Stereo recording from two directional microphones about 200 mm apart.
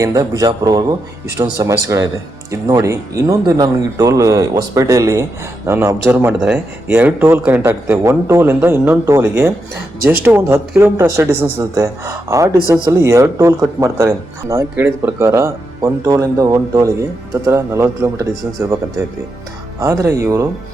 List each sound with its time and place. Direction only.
0.0 s speech: 15° right (ahead or behind)